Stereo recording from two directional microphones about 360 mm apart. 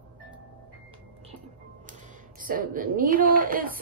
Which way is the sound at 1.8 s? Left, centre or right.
Right.